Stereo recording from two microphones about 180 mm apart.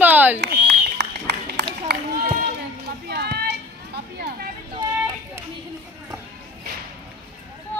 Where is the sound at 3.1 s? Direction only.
65° right (ahead or behind).